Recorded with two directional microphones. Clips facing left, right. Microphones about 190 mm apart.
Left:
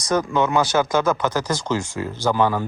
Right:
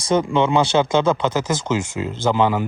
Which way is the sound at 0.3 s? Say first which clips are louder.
Right 2 dB; 25° right (ahead or behind).